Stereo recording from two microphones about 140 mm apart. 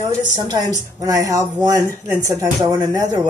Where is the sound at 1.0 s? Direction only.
25° right (ahead or behind).